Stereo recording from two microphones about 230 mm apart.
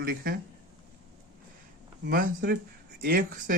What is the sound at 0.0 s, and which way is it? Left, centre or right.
Speech, right.